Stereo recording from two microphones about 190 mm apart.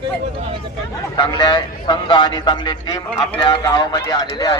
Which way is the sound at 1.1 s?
25° left (ahead or behind).